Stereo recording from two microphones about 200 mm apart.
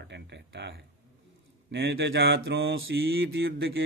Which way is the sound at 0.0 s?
60° right (ahead or behind).